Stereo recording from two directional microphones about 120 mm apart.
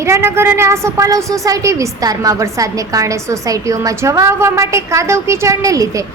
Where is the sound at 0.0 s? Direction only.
20° right (ahead or behind).